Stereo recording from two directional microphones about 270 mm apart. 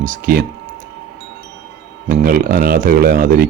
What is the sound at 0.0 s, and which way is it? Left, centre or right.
Speech, right.